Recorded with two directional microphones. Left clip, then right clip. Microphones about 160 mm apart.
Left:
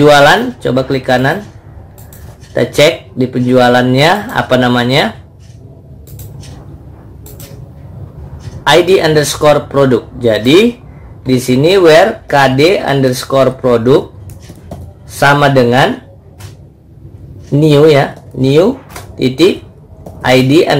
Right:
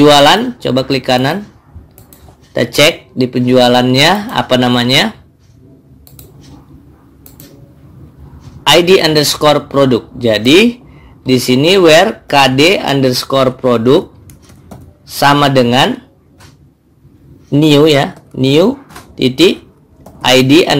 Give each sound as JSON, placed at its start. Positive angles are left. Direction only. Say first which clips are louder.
{"t": 0.0, "sound": "speech", "louder": "left 1 dB", "side_deg": -40}
{"t": 2.5, "sound": "speech", "louder": "left 1 dB", "side_deg": -40}
{"t": 8.6, "sound": "speech", "louder": "even", "side_deg": -40}
{"t": 15.1, "sound": "speech", "louder": "left 1 dB", "side_deg": -35}
{"t": 17.5, "sound": "speech", "louder": "left 1 dB", "side_deg": -35}
{"t": 20.2, "sound": "speech", "louder": "right 1 dB", "side_deg": -40}